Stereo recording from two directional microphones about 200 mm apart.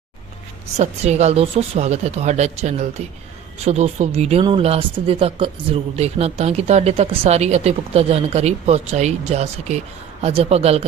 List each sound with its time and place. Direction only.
0.8 s speech: 35° right (ahead or behind)